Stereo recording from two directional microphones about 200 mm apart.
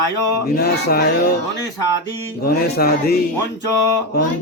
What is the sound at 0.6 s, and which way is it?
Speech, 50° left (ahead or behind).